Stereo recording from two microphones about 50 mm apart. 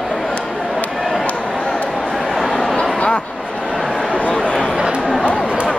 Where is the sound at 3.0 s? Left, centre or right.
Centre.